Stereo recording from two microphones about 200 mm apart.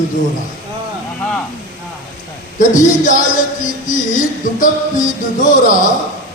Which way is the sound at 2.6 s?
40° left (ahead or behind).